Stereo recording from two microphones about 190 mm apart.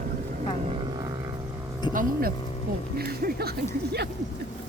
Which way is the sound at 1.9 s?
25° left (ahead or behind).